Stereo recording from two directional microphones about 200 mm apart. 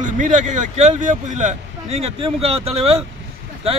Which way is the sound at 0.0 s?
40° right (ahead or behind).